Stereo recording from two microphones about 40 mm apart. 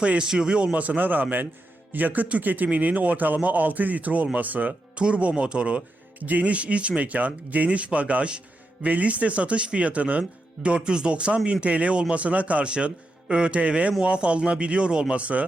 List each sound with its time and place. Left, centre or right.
0.0 s speech: right
4.9 s speech: right
10.8 s speech: right
13.2 s speech: right